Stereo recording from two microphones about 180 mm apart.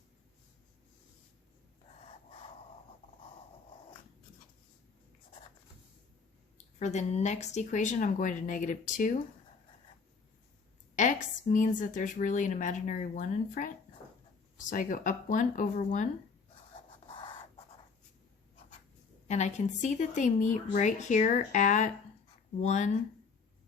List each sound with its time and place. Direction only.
6.7 s a woman's voice: 40° left (ahead or behind)
10.9 s a woman's voice: 45° left (ahead or behind)
17.1 s scratch: 30° left (ahead or behind)
19.3 s a woman's voice: 40° left (ahead or behind)